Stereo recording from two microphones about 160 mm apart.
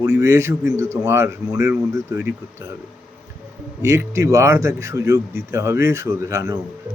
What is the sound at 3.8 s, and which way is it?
Speech, 20° right (ahead or behind).